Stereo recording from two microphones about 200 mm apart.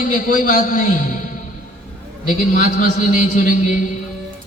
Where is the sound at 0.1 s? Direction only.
40° left (ahead or behind).